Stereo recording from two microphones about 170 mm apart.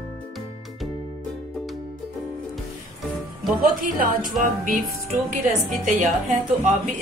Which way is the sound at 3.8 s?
55° right (ahead or behind).